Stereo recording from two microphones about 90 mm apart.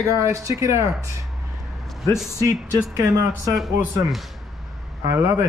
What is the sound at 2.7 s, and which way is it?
Speech, 35° right (ahead or behind).